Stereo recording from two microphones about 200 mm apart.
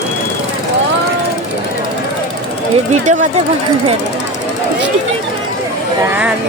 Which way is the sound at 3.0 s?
40° right (ahead or behind).